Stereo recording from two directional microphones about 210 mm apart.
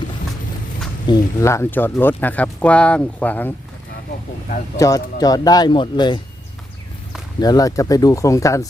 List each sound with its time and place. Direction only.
1.0 s speech: 15° left (ahead or behind)
4.8 s speech: 15° left (ahead or behind)
7.4 s speech: 15° left (ahead or behind)